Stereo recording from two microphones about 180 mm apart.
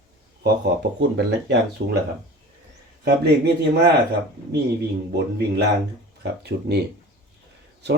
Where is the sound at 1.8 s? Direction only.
55° right (ahead or behind).